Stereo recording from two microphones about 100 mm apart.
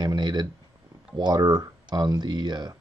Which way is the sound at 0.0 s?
45° right (ahead or behind).